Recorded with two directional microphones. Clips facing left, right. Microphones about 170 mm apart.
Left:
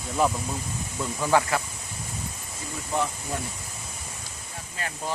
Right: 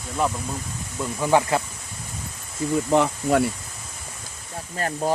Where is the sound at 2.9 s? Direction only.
90° right.